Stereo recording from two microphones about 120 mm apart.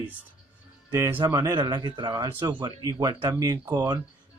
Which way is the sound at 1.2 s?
30° right (ahead or behind).